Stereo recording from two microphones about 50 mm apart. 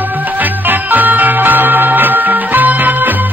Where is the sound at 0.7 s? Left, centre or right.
Right.